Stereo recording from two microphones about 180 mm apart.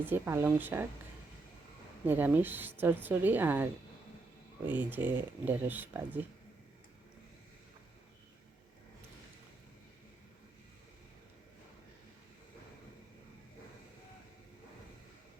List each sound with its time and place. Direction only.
0.0 s a woman's voice: 10° right (ahead or behind)
2.0 s a woman's voice: 10° right (ahead or behind)